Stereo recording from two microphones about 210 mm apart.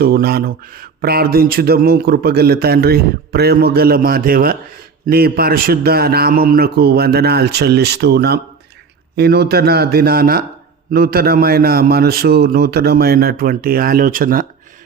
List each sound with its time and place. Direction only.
0.0 s speech: 50° right (ahead or behind)